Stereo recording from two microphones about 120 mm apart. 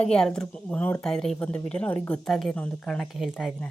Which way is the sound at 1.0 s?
5° left (ahead or behind).